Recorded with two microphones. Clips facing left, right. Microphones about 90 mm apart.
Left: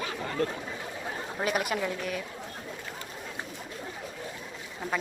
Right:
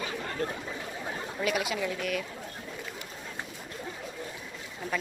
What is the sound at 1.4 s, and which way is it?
Speech, 50° left (ahead or behind).